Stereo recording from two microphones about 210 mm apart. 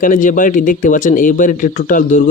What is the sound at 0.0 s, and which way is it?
Speech, 40° left (ahead or behind).